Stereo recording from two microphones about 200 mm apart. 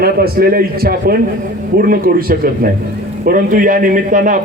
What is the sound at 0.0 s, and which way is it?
A man's voice, 50° right (ahead or behind).